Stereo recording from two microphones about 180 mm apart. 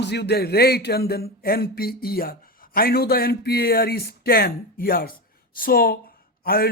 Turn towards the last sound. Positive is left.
turn(degrees=55)  # may be behind; listen again after turning